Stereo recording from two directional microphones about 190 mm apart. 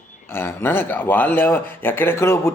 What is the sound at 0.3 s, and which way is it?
A man's voice, 10° left (ahead or behind).